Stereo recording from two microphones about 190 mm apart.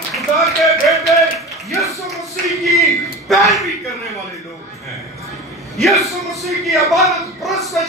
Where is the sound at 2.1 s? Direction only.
Centre (ahead or behind).